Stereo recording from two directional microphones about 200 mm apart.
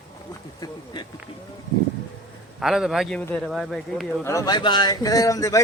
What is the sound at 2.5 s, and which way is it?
Speech, centre (ahead or behind).